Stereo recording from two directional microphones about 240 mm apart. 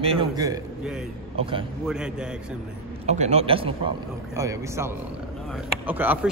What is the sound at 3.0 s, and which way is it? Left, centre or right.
A man's voice, right.